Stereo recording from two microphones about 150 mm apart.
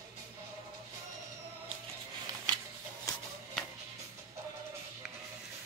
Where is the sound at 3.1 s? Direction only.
25° left (ahead or behind).